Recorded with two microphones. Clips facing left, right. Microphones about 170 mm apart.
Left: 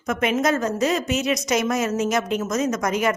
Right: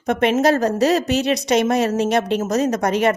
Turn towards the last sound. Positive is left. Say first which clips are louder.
# right 4 dB
turn(degrees=-30)  # may be behind; listen again after turning